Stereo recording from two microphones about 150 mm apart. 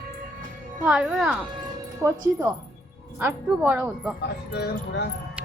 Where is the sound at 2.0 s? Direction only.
15° right (ahead or behind).